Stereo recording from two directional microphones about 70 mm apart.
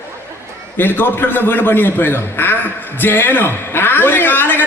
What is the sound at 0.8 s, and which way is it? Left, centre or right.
A man's voice, left.